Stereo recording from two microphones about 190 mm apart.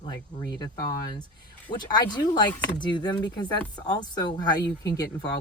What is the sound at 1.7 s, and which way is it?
Speech, 20° left (ahead or behind).